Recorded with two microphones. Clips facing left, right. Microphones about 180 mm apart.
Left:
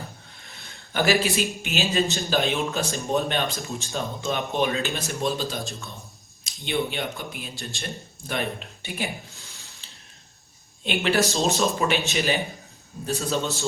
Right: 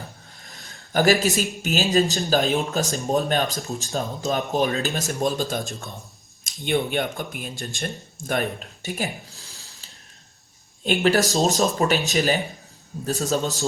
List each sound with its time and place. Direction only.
0.4 s speech: 40° right (ahead or behind)